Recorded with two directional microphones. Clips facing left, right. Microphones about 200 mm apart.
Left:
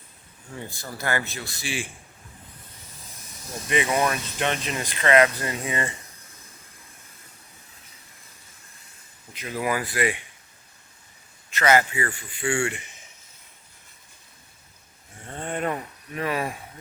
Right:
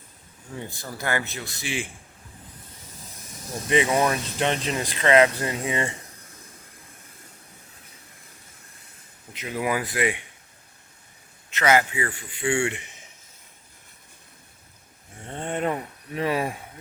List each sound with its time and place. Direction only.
0.9 s speech: 15° right (ahead or behind)
3.7 s speech: 25° right (ahead or behind)
9.3 s speech: 20° right (ahead or behind)
11.5 s speech: 15° right (ahead or behind)
15.3 s speech: 20° right (ahead or behind)